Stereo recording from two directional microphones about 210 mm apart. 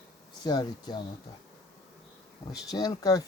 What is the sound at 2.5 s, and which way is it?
Speech, 20° left (ahead or behind).